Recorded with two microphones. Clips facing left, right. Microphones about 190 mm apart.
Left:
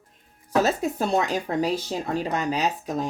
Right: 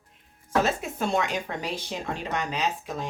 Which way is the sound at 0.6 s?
35° left (ahead or behind).